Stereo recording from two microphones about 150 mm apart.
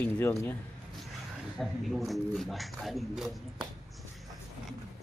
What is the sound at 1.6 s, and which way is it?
Speech, centre (ahead or behind).